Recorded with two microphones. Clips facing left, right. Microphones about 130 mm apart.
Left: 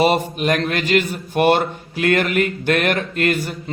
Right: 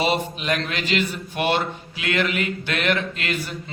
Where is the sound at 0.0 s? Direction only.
50° left (ahead or behind).